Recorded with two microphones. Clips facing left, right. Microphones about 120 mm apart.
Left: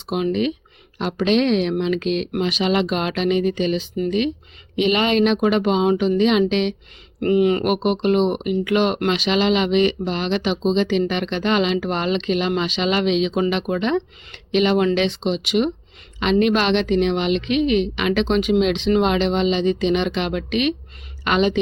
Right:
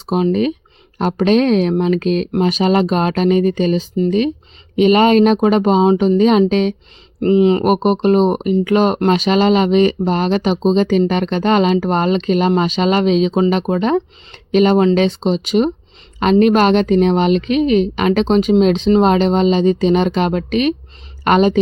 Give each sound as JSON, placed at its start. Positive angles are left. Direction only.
{"t": 0.0, "sound": "a woman's voice", "side_deg": -40}
{"t": 7.2, "sound": "a woman's voice", "side_deg": -25}